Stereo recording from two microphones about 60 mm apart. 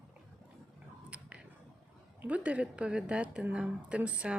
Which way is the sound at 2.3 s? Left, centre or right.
Right.